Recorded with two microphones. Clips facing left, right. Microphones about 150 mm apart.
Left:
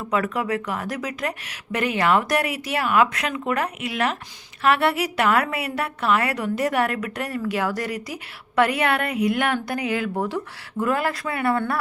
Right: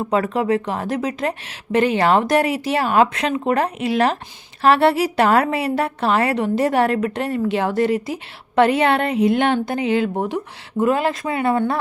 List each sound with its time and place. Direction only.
0.0 s a woman's voice: 30° right (ahead or behind)